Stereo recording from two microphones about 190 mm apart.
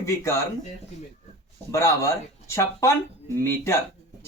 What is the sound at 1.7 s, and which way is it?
Speech, 15° left (ahead or behind).